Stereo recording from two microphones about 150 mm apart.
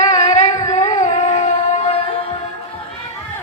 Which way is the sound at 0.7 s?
50° left (ahead or behind).